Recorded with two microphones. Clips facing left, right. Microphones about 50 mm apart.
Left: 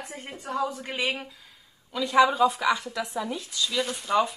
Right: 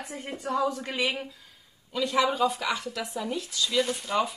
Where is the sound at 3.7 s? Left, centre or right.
Centre.